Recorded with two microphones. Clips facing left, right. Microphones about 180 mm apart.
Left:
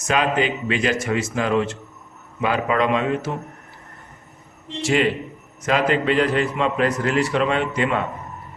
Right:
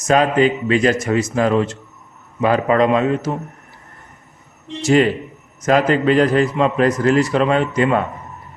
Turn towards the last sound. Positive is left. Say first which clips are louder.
# right 5 dB
turn(degrees=-40)  # may be behind; listen again after turning